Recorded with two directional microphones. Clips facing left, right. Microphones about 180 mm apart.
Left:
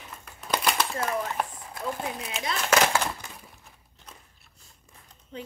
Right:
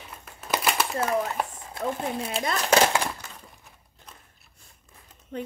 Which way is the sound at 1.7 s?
30° right (ahead or behind).